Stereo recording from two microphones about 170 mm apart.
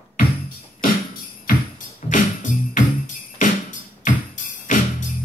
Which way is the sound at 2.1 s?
50° left (ahead or behind).